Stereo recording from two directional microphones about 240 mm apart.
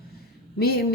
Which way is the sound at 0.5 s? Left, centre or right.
Left.